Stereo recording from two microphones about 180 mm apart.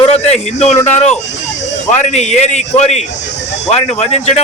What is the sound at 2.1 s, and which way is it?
A man's voice, 40° left (ahead or behind).